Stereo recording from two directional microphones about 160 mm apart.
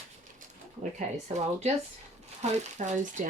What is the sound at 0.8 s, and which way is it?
Speech, 50° right (ahead or behind).